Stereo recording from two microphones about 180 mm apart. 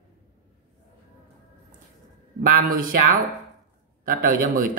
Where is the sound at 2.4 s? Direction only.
50° right (ahead or behind).